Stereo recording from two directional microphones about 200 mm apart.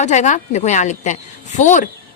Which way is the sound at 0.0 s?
35° left (ahead or behind).